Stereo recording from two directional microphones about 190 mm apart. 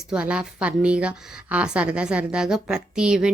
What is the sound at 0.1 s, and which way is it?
A woman's voice, 5° right (ahead or behind).